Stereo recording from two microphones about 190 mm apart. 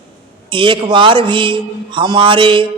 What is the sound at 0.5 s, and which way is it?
A man's voice, 25° right (ahead or behind).